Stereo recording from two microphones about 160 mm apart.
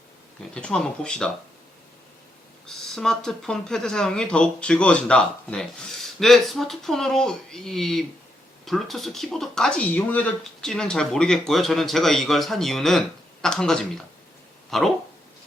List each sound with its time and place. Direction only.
0.5 s speech: 5° left (ahead or behind)
2.6 s speech: centre (ahead or behind)